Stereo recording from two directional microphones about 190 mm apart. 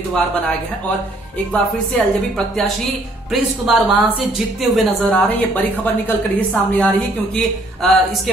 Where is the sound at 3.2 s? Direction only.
Centre (ahead or behind).